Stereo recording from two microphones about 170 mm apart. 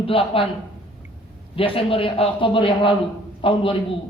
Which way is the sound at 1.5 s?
30° left (ahead or behind).